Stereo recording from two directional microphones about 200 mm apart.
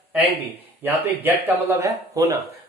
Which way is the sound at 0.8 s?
10° right (ahead or behind).